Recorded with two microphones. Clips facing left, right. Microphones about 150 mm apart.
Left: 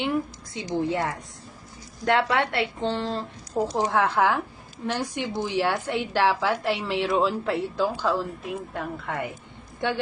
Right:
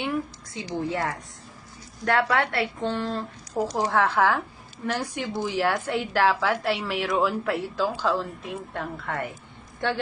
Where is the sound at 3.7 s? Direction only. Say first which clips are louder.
Even; 15° left (ahead or behind).